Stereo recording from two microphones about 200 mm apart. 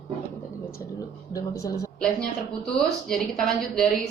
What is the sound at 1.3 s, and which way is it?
Speech, 15° left (ahead or behind).